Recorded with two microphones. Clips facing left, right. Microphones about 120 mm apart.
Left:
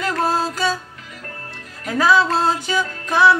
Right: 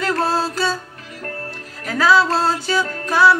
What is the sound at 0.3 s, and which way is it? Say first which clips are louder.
Music: even; 15° left (ahead or behind).